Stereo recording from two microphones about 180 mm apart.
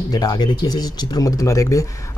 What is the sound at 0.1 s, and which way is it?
Speech, 20° left (ahead or behind).